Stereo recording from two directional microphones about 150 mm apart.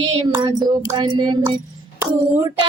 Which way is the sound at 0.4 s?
30° right (ahead or behind).